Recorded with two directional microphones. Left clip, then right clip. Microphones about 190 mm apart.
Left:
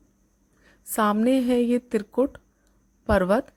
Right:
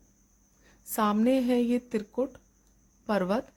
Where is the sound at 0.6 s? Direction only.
20° left (ahead or behind).